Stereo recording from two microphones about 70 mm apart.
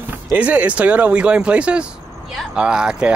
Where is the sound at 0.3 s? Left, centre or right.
Right.